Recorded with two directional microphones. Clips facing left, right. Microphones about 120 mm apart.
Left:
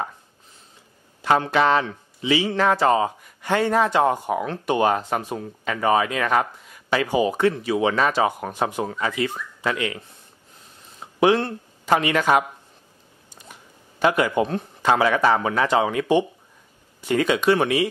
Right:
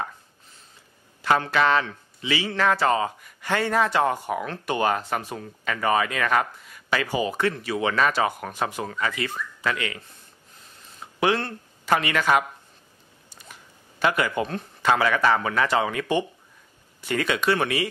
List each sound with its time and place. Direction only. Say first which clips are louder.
1.2 s speech: left 2 dB; 20° left (ahead or behind)